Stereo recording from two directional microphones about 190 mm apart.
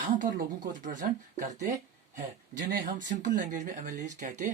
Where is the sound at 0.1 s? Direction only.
45° right (ahead or behind).